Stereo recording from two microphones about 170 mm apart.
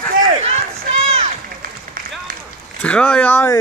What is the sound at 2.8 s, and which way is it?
Speech, 5° left (ahead or behind).